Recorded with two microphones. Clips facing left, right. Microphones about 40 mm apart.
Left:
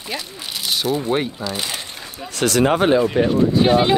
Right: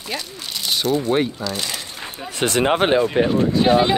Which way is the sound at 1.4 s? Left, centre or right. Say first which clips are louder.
Even; centre.